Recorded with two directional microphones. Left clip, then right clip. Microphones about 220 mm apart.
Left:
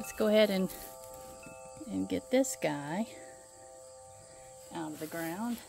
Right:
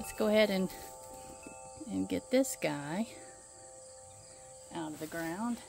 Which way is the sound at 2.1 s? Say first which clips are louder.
Left 1 dB; centre (ahead or behind).